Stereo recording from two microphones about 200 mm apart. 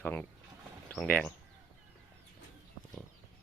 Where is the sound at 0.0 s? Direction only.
10° left (ahead or behind).